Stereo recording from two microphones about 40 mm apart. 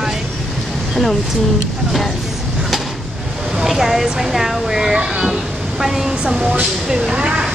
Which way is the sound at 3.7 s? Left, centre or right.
Centre.